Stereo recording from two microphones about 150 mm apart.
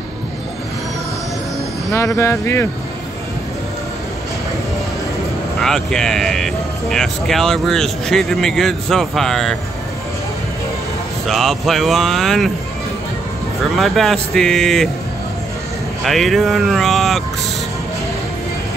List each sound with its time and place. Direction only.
1.9 s speech: 20° left (ahead or behind)
5.6 s speech: 5° left (ahead or behind)
11.2 s speech: centre (ahead or behind)
13.7 s speech: centre (ahead or behind)
16.1 s speech: centre (ahead or behind)